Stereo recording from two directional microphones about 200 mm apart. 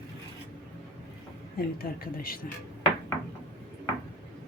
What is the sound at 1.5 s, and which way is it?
Speech, 50° left (ahead or behind).